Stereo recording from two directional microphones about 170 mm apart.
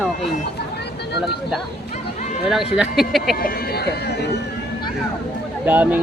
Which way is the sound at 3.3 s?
65° left (ahead or behind).